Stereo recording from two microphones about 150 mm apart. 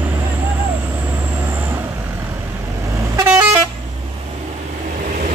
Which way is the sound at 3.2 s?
10° right (ahead or behind).